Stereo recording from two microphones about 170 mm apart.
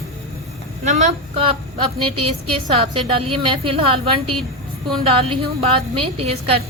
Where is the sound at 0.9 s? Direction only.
45° right (ahead or behind).